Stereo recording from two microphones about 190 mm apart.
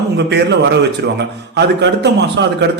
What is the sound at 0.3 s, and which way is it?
A man's voice, 65° right (ahead or behind).